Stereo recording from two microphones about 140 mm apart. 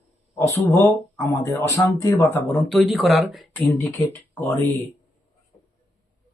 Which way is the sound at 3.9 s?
15° left (ahead or behind).